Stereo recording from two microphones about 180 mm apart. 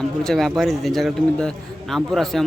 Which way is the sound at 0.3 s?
Centre (ahead or behind).